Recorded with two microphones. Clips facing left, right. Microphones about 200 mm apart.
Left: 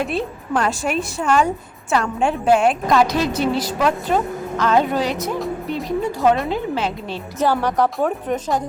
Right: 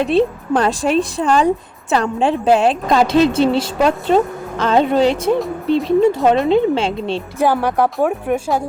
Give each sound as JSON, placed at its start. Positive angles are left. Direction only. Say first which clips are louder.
{"t": 0.1, "sound": "a woman's voice", "louder": "right 8 dB", "side_deg": -30}
{"t": 7.3, "sound": "speech", "louder": "right 2 dB", "side_deg": -10}